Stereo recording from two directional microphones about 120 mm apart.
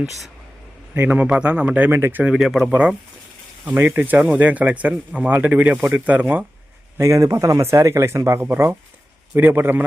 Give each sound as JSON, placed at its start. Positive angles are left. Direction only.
{"t": 0.9, "sound": "speech", "side_deg": -15}
{"t": 2.3, "sound": "speech", "side_deg": -5}
{"t": 3.7, "sound": "speech", "side_deg": -20}
{"t": 7.0, "sound": "speech", "side_deg": -25}